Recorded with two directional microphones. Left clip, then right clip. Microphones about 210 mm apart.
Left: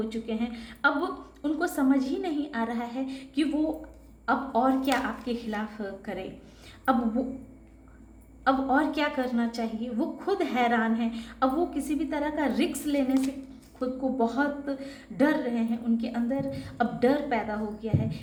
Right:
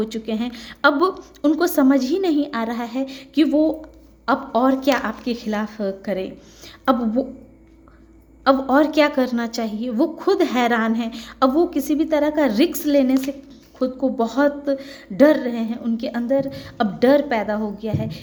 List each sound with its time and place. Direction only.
0.0 s a woman's voice: 50° right (ahead or behind)
8.4 s a woman's voice: 50° right (ahead or behind)